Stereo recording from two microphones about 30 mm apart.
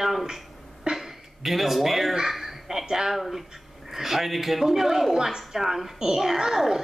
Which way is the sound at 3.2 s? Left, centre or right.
Centre.